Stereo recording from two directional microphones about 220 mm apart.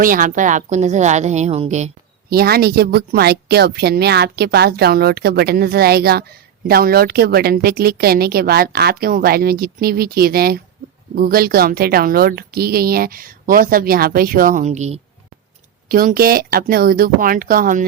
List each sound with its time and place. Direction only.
0.0 s a woman's voice: 40° right (ahead or behind)
2.3 s a woman's voice: 45° right (ahead or behind)
15.9 s a woman's voice: 40° right (ahead or behind)